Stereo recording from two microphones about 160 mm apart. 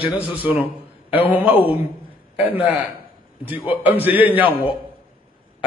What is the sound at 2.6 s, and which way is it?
A man's voice, 10° right (ahead or behind).